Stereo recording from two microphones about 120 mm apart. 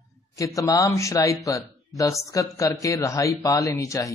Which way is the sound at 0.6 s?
25° left (ahead or behind).